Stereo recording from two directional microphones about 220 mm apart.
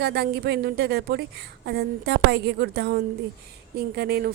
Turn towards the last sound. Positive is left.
turn(degrees=-45)  # may be behind; listen again after turning